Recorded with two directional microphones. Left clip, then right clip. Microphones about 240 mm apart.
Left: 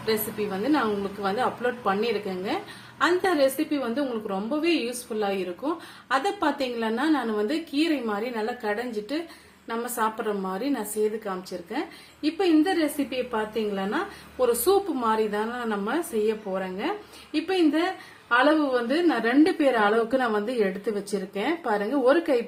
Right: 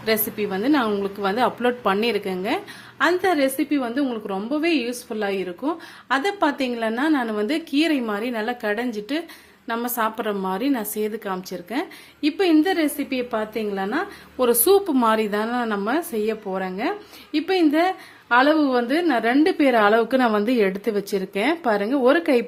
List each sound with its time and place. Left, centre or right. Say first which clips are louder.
0.0 s a woman's voice: right 4 dB; right
10.2 s a woman's voice: right 4 dB; right
12.2 s a woman's voice: right 4 dB; right